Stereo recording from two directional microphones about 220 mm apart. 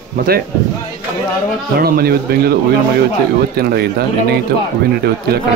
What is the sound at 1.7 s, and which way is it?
Speech, 45° right (ahead or behind).